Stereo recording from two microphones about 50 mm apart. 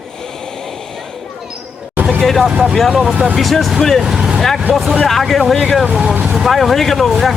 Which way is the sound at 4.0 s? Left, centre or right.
Centre.